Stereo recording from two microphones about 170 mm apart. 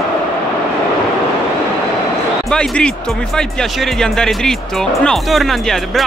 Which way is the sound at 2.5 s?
5° left (ahead or behind).